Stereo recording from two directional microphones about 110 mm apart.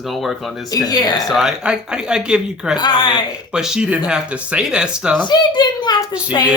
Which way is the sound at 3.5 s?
5° right (ahead or behind).